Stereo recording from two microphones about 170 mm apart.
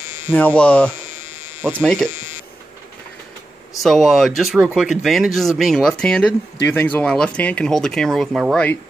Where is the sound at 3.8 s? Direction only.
Centre (ahead or behind).